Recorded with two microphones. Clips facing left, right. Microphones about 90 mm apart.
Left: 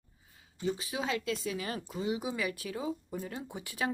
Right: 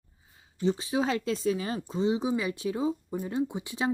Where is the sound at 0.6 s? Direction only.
30° right (ahead or behind).